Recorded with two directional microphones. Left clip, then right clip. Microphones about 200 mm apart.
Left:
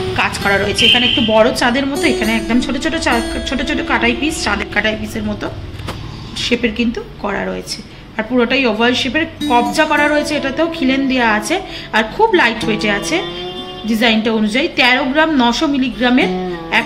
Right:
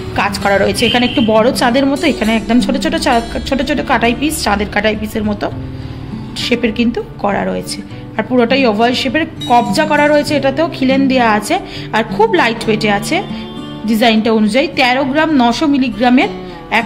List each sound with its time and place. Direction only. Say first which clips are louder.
0.1 s a woman's voice: right 3 dB; 65° right (ahead or behind)